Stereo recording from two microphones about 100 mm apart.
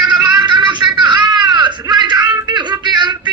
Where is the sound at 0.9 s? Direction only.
50° right (ahead or behind).